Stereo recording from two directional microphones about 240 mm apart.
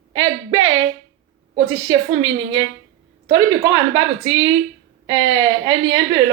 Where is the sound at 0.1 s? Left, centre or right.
Centre.